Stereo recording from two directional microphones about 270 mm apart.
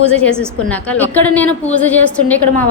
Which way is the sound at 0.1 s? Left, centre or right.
Centre.